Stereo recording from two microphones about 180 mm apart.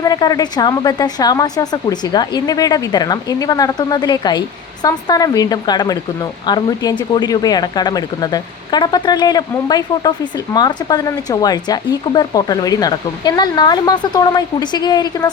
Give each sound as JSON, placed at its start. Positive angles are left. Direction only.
{"t": 0.0, "sound": "speech", "side_deg": 20}